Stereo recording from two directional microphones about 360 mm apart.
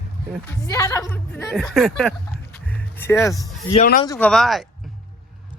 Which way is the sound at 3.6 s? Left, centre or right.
Left.